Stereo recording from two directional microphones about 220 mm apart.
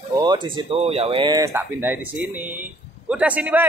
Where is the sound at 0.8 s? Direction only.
25° right (ahead or behind).